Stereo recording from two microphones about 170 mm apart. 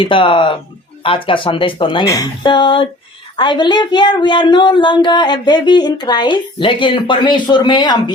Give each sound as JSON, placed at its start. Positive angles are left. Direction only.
{"t": 0.0, "sound": "a woman's voice", "side_deg": 30}